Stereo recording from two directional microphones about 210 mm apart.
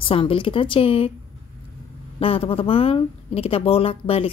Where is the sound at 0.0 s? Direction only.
25° left (ahead or behind).